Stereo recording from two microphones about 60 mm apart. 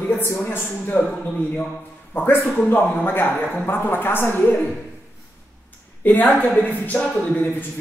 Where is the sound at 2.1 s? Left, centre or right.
Left.